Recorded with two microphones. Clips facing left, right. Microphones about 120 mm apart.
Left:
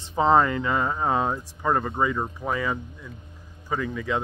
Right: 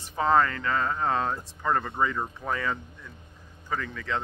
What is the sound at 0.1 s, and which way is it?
Speech, 20° left (ahead or behind).